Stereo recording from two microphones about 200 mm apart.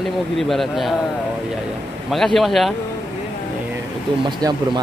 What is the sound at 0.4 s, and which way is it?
Speech, centre (ahead or behind).